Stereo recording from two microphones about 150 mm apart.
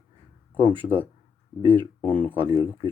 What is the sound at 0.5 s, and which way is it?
Speech, 35° right (ahead or behind).